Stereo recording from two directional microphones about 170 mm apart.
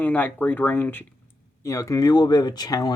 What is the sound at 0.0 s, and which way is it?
Speech, 10° left (ahead or behind).